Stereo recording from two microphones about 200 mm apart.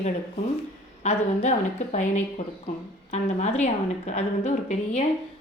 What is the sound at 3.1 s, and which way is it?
A woman's voice, 35° left (ahead or behind).